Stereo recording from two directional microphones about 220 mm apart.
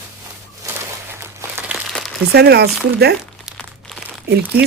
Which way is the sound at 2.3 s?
50° right (ahead or behind).